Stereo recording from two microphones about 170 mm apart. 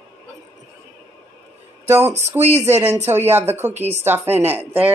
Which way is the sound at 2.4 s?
40° right (ahead or behind).